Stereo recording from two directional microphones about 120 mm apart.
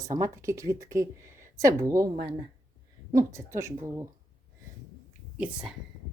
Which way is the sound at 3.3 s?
25° right (ahead or behind).